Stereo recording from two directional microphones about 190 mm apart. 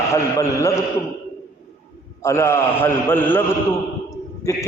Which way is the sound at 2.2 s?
15° left (ahead or behind).